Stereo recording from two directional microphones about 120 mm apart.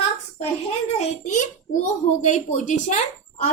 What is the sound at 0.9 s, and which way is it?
A child's voice, 80° left.